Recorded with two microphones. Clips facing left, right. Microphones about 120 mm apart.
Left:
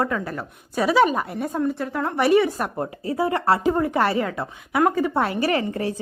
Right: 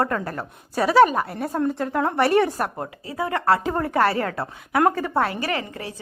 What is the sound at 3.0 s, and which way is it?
Speech, 40° left (ahead or behind).